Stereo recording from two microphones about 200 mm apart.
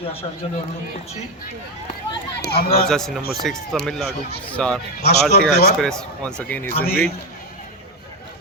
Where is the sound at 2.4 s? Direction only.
50° left (ahead or behind).